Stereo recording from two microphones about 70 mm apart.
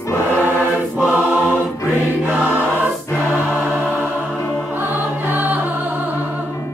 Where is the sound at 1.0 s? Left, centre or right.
Right.